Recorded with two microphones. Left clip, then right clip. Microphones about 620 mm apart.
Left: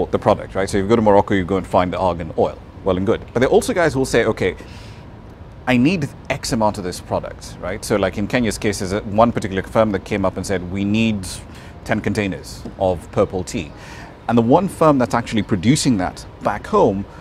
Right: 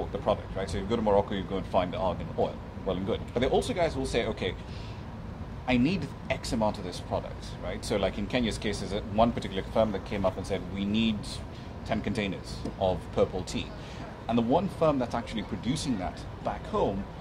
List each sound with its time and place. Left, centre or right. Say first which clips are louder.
0.1 s speech: left 12 dB; left
5.7 s speech: left 11 dB; left
14.2 s speech: left 12 dB; left